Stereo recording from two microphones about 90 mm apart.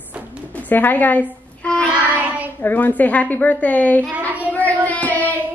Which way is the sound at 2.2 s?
20° right (ahead or behind).